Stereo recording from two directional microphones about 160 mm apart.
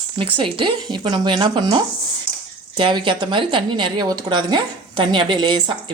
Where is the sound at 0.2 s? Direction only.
30° right (ahead or behind).